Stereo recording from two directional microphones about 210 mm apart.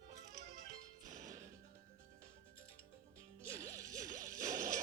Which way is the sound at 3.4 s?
15° right (ahead or behind).